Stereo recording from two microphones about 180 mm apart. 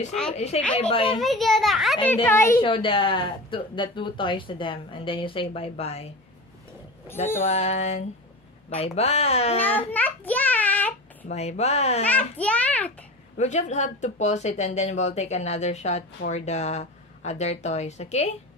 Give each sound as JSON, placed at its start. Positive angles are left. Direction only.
{"t": 0.1, "sound": "a child's voice", "side_deg": 0}
{"t": 0.7, "sound": "speech", "side_deg": 30}
{"t": 1.2, "sound": "a child's voice", "side_deg": 0}
{"t": 2.2, "sound": "a child's voice", "side_deg": 15}
{"t": 2.6, "sound": "speech", "side_deg": 30}
{"t": 7.4, "sound": "speech", "side_deg": 40}
{"t": 9.6, "sound": "child singing", "side_deg": 10}
{"t": 11.2, "sound": "speech", "side_deg": 35}
{"t": 12.0, "sound": "a child's voice", "side_deg": 10}
{"t": 13.4, "sound": "speech", "side_deg": 40}